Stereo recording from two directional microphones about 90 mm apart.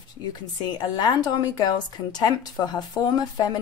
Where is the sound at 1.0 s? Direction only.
45° left (ahead or behind).